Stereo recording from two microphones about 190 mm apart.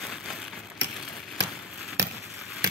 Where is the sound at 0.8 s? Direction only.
70° right (ahead or behind).